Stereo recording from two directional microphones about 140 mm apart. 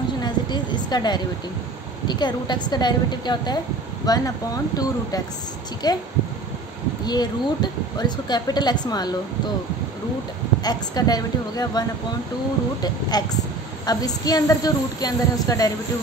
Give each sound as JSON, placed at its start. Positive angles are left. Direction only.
{"t": 0.2, "sound": "a woman's voice", "side_deg": 30}
{"t": 5.8, "sound": "speech", "side_deg": 30}
{"t": 7.1, "sound": "speech", "side_deg": 30}
{"t": 10.6, "sound": "speech", "side_deg": 30}
{"t": 12.8, "sound": "speech", "side_deg": 30}